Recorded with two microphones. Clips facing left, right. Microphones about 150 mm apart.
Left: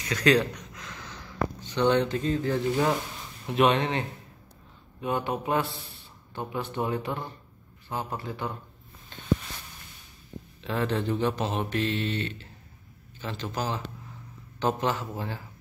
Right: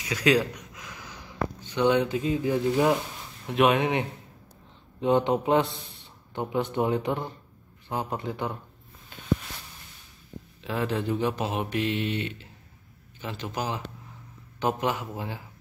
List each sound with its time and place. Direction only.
0.0 s a sound: 10° right (ahead or behind)
3.4 s mantra: 5° right (ahead or behind)
5.0 s speech: 20° right (ahead or behind)
6.3 s mantra: 20° right (ahead or behind)
9.1 s a sound: 10° right (ahead or behind)
10.6 s mantra: 10° right (ahead or behind)